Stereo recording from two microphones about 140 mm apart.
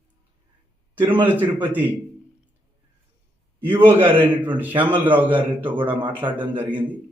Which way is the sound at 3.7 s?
15° right (ahead or behind).